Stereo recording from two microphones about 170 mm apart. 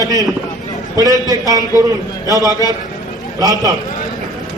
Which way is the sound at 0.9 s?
20° right (ahead or behind).